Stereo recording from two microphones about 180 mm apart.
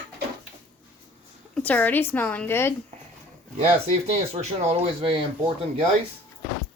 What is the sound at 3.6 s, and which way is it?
Speech, 35° right (ahead or behind).